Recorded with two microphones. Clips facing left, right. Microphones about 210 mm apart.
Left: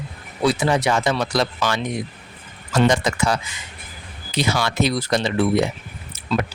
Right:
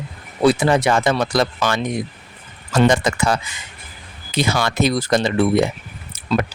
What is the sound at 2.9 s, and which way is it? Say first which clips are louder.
Speech: right 2 dB; 55° right (ahead or behind).